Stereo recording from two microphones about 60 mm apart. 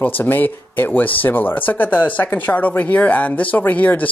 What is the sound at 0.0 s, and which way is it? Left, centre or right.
Speech, left.